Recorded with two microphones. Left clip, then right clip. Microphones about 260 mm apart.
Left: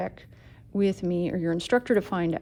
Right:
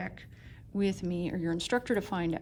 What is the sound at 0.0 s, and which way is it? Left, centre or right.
A woman's voice, left.